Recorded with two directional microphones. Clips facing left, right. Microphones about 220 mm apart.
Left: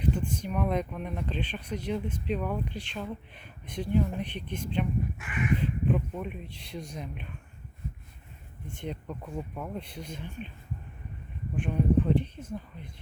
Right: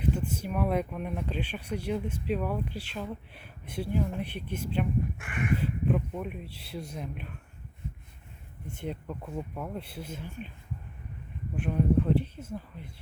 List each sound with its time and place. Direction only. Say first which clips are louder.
0.0 s speech: even; 5° right (ahead or behind)
5.1 s crow: left 1 dB; 55° right (ahead or behind)
5.5 s speech: right 1 dB; 5° right (ahead or behind)
8.6 s speech: right 1 dB; 5° right (ahead or behind)
11.5 s speech: even; 5° right (ahead or behind)